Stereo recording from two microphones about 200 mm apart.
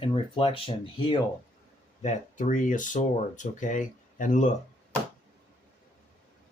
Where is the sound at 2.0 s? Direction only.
40° left (ahead or behind).